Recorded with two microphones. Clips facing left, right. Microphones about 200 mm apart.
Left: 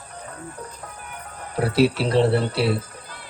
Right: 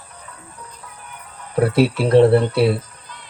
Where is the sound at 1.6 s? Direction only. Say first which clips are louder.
Right 3 dB; 55° right (ahead or behind).